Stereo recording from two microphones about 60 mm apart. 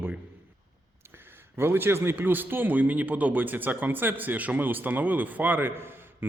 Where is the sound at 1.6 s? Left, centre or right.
Right.